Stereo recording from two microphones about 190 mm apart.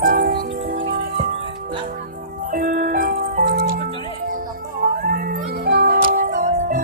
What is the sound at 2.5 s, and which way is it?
Music, 45° right (ahead or behind).